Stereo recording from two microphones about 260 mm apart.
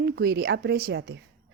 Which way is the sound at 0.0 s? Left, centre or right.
Right.